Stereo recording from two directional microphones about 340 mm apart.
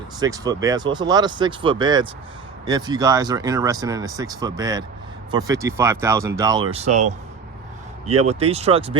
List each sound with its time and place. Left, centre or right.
0.2 s speech: centre